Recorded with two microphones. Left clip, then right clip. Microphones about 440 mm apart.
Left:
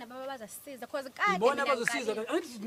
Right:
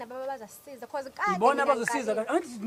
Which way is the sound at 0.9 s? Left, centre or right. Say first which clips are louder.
Right 1 dB; left.